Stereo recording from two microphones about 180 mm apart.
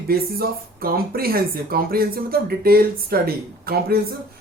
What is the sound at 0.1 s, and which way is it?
Speech, 55° right (ahead or behind).